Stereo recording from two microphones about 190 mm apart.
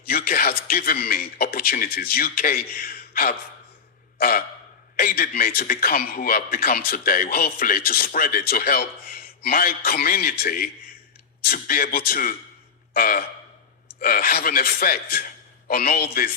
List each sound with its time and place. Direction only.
0.0 s a man's voice: 50° left (ahead or behind)
4.2 s a sound: 50° left (ahead or behind)
4.9 s a man's voice: 50° left (ahead or behind)
12.9 s gasp: 50° left (ahead or behind)
14.0 s a man's voice: 50° left (ahead or behind)